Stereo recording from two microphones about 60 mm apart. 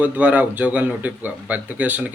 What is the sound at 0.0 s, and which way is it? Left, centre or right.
Speech, right.